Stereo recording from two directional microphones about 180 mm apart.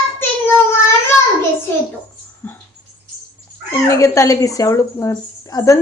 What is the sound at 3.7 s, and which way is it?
Speech, 15° left (ahead or behind).